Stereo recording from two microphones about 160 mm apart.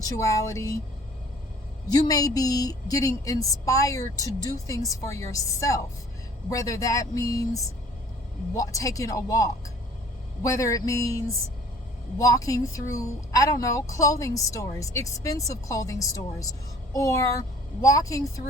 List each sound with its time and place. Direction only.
0.2 s speech: 20° left (ahead or behind)
1.9 s speech: 25° left (ahead or behind)